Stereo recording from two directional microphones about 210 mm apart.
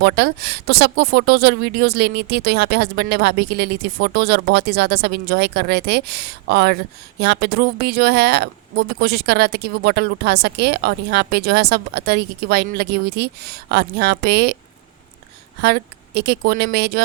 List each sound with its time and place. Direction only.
0.0 s speech: 50° right (ahead or behind)
15.6 s speech: 50° right (ahead or behind)